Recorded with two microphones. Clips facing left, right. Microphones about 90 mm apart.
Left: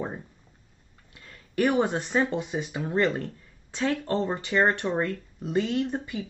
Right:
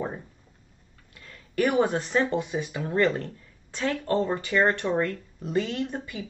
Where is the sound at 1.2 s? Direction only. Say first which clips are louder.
Even; 15° left (ahead or behind).